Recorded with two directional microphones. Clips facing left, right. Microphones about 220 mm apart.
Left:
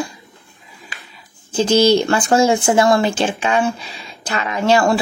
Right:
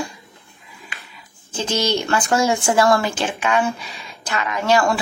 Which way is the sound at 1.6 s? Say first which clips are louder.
Left 8 dB; 35° left (ahead or behind).